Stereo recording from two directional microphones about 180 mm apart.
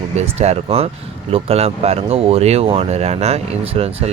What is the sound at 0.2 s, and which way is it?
Speech, 35° right (ahead or behind).